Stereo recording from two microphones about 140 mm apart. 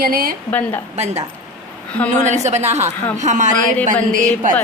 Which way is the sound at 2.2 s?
55° right (ahead or behind).